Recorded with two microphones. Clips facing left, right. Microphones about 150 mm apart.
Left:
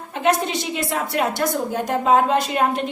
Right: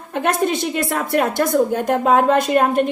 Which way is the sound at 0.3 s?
50° right (ahead or behind).